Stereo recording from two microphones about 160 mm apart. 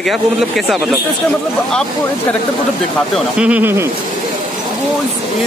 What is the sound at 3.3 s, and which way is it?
Speech, 10° right (ahead or behind).